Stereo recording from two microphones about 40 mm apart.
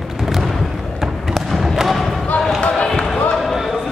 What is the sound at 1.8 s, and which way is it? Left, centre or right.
Basketball bounce, centre.